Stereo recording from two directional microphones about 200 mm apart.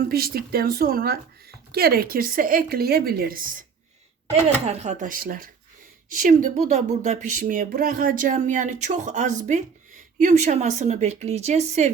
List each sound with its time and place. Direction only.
0.0 s a woman's voice: 50° right (ahead or behind)
4.6 s speech: 35° right (ahead or behind)